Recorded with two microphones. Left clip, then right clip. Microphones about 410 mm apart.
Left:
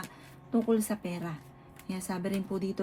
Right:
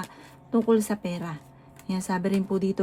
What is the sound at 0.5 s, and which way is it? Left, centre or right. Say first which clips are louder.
Speech: right 6 dB; right.